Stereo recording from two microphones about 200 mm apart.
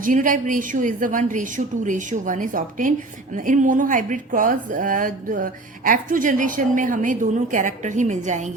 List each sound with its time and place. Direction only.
0.0 s speech: 40° right (ahead or behind)